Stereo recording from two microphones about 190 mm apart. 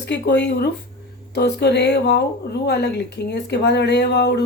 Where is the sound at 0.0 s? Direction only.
65° left (ahead or behind).